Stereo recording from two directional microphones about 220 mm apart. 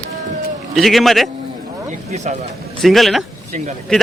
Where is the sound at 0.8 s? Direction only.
Centre (ahead or behind).